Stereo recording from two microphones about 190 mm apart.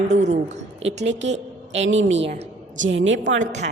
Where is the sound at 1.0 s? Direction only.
70° right (ahead or behind).